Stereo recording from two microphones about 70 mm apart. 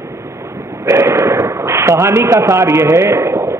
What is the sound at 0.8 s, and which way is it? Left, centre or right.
Speech, right.